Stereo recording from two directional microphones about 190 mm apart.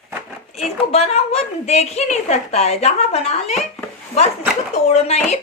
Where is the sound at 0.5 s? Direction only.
35° left (ahead or behind).